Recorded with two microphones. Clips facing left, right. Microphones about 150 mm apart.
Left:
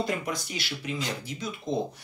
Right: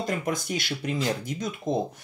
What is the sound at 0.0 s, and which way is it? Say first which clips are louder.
Speech: right 2 dB; 50° right (ahead or behind).